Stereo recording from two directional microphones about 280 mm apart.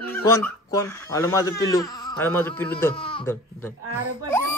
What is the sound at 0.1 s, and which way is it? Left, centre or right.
Speech, centre.